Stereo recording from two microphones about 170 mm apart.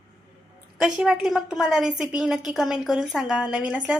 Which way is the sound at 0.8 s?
5° right (ahead or behind).